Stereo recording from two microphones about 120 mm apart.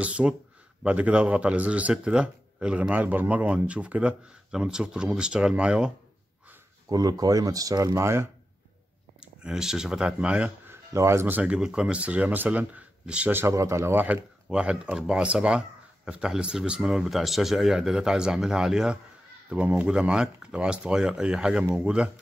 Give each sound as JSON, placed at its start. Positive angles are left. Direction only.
{"t": 0.0, "sound": "a man's voice", "side_deg": -10}
{"t": 6.9, "sound": "speech", "side_deg": -30}
{"t": 9.2, "sound": "speech", "side_deg": -5}
{"t": 10.9, "sound": "a man's voice", "side_deg": -25}